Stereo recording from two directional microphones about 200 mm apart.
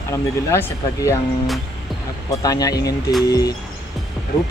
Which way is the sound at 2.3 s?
20° left (ahead or behind).